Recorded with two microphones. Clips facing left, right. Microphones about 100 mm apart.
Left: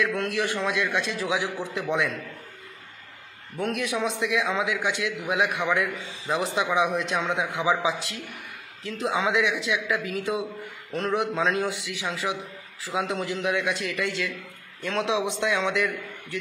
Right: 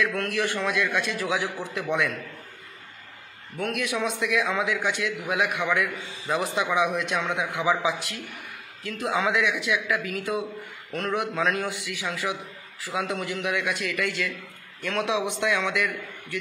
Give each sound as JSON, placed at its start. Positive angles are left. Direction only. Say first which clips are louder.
{"t": 0.0, "sound": "a man's voice", "louder": "even", "side_deg": 20}
{"t": 3.5, "sound": "a man's voice", "louder": "left 1 dB", "side_deg": 25}